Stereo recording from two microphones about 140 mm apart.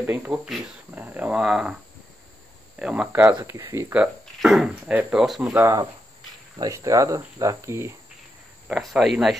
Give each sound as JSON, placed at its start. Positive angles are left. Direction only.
{"t": 0.0, "sound": "speech", "side_deg": -15}
{"t": 2.8, "sound": "speech", "side_deg": -5}
{"t": 5.5, "sound": "speech", "side_deg": -25}
{"t": 8.6, "sound": "speech", "side_deg": -5}